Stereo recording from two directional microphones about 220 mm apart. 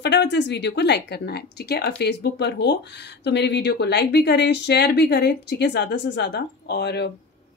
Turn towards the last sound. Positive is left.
turn(degrees=50)  # may be behind; listen again after turning